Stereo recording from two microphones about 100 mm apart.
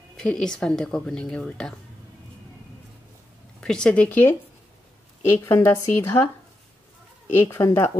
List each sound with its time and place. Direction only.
0.1 s speech: 10° left (ahead or behind)
3.6 s a woman's voice: 10° left (ahead or behind); by 6.3 s 25° left (ahead or behind)
7.4 s a woman's voice: 25° left (ahead or behind)